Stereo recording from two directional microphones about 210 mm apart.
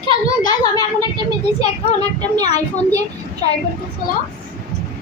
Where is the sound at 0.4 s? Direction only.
20° left (ahead or behind).